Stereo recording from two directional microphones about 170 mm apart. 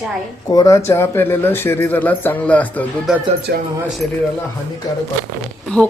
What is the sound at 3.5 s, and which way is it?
Speech, 75° right (ahead or behind).